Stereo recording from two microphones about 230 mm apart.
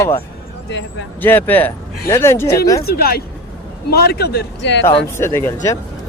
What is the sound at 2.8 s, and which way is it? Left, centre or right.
A man's voice, left.